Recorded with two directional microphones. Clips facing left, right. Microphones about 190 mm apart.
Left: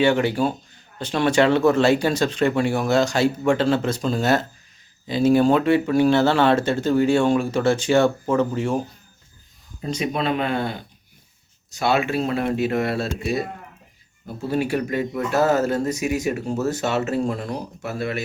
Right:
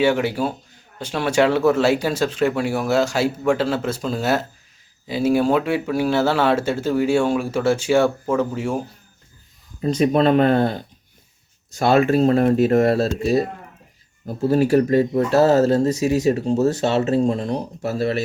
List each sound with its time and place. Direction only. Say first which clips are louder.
0.0 s speech: even; 10° right (ahead or behind)
10.0 s speech: right 8 dB; 45° right (ahead or behind)